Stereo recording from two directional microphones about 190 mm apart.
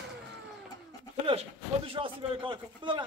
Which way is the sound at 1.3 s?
30° right (ahead or behind).